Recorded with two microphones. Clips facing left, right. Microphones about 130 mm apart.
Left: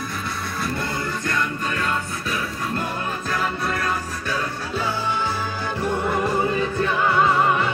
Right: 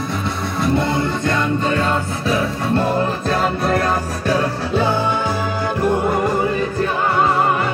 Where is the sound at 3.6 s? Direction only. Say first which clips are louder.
Right 7 dB; 70° right (ahead or behind).